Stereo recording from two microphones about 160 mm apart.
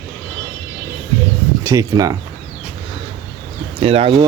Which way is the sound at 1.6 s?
20° right (ahead or behind).